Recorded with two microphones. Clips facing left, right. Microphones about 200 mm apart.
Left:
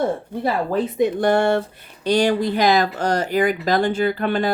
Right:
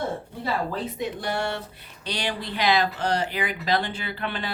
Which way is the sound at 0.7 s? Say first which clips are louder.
Left 10 dB; 50° left (ahead or behind).